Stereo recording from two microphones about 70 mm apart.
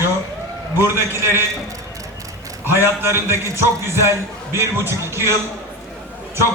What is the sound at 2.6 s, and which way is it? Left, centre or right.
A man's voice, right.